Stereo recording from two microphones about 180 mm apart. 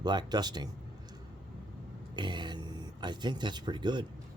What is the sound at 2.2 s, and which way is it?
Speech, 25° right (ahead or behind).